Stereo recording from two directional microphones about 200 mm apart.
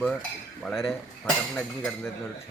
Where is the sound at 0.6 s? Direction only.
Centre (ahead or behind).